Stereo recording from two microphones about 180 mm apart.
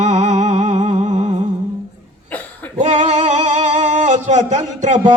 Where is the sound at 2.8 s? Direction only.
40° right (ahead or behind).